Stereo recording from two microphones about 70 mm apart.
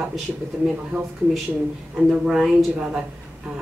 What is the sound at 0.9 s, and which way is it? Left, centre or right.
Speech, right.